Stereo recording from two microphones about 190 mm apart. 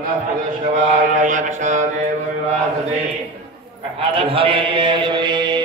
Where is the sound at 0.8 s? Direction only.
40° right (ahead or behind).